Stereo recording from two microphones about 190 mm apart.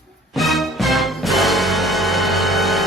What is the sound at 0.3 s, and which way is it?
Music, centre (ahead or behind).